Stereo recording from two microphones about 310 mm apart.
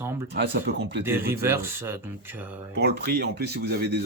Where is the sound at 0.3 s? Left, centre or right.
Right.